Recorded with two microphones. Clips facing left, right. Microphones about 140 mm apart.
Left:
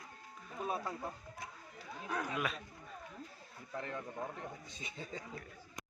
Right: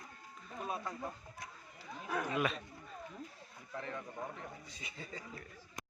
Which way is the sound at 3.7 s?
Centre (ahead or behind).